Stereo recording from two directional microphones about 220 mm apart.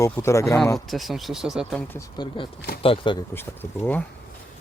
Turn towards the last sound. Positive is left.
turn(degrees=10)  # may be behind; listen again after turning